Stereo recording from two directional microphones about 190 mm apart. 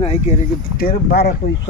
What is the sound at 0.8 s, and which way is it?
Speech, 55° left (ahead or behind).